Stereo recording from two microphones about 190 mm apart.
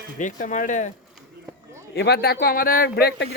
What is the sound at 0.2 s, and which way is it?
Speech, 40° left (ahead or behind).